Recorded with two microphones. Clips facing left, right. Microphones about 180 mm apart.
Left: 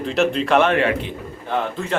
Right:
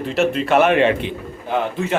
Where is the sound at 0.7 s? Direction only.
20° right (ahead or behind).